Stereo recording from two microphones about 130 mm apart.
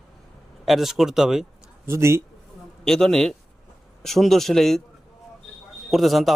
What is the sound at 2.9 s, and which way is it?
Speech, 5° left (ahead or behind).